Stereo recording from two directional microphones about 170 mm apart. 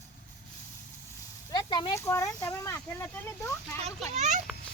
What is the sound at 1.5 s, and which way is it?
Speech, 25° left (ahead or behind).